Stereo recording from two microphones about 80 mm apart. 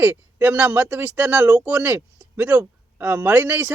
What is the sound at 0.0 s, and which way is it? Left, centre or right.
Speech, right.